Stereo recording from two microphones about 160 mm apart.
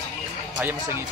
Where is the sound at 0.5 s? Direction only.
10° right (ahead or behind).